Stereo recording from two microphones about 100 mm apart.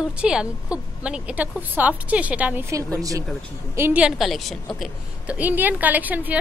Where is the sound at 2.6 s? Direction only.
35° right (ahead or behind).